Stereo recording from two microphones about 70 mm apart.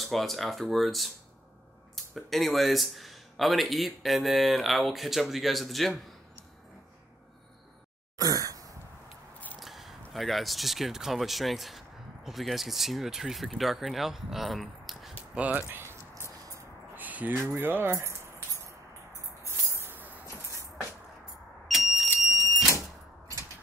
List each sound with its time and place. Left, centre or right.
0.0 s speech: centre
8.2 s sigh: right
9.6 s a sound: centre
10.1 s speech: centre
15.3 s a sound: right
16.9 s a sound: right
17.5 s speech: right
19.4 s music: right
21.6 s vehicle: centre